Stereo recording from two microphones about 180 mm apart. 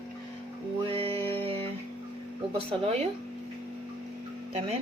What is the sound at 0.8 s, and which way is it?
Speech, 30° right (ahead or behind).